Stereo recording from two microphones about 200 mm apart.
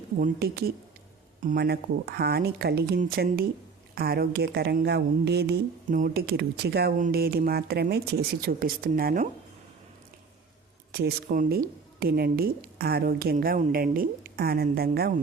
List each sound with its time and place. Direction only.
0.2 s speech: 50° right (ahead or behind)
1.4 s speech: 40° right (ahead or behind)
1.6 s speech: 50° right (ahead or behind)
10.9 s speech: 45° right (ahead or behind)